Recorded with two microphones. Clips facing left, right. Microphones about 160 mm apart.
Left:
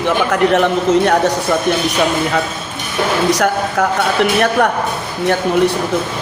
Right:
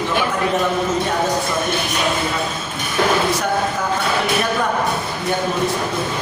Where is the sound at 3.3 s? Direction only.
80° left.